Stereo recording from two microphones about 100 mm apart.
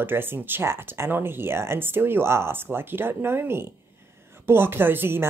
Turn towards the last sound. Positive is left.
turn(degrees=-20)  # may be behind; listen again after turning